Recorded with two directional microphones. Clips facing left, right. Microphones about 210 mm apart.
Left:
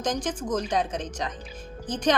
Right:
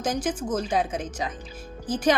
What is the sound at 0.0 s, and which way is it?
A woman's voice, 5° right (ahead or behind).